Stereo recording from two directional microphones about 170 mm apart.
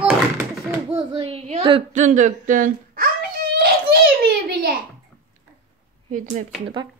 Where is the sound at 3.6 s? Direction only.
65° right (ahead or behind).